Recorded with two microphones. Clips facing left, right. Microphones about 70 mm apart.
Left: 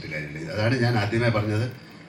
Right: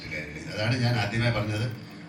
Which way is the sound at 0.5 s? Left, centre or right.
Left.